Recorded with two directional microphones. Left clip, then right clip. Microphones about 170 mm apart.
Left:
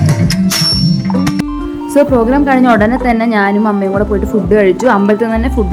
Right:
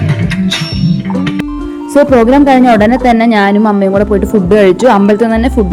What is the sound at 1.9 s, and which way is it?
A woman's voice, 30° right (ahead or behind).